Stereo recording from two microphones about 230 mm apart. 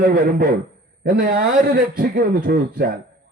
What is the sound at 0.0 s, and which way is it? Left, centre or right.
A man's voice, right.